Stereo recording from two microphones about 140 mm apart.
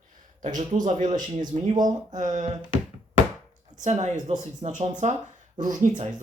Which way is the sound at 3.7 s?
55° right (ahead or behind).